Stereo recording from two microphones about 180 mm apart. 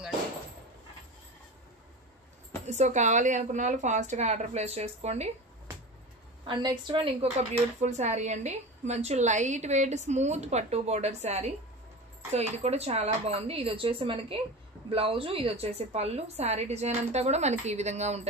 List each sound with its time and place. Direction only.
2.6 s speech: 40° right (ahead or behind)
6.4 s speech: 25° right (ahead or behind)